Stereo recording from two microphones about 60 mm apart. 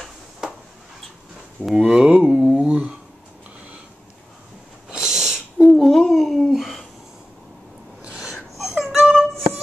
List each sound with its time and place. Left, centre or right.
1.8 s speech: centre
2.1 s a sound: centre
2.5 s speech: centre
4.8 s a sound: centre
8.0 s gasp: centre
8.5 s music: centre